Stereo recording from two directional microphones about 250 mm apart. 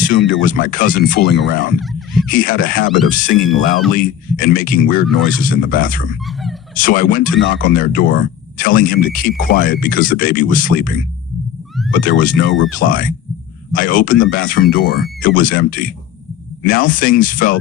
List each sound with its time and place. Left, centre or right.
0.0 s speech: left
1.8 s a sound: centre
2.3 s speech: left
12.5 s speech: left
12.8 s speech: left